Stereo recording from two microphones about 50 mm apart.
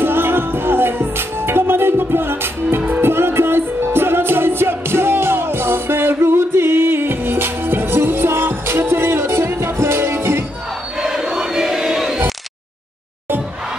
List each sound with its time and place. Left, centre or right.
0.0 s music: right
11.0 s crowd: centre